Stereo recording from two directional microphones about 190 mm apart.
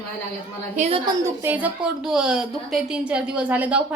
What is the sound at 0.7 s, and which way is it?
Speech, 35° right (ahead or behind).